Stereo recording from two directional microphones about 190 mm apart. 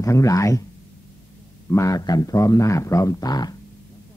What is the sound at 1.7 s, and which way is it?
Speech, 15° left (ahead or behind).